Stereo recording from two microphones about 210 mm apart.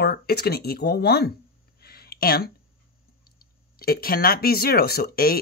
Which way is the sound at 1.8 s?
50° left (ahead or behind).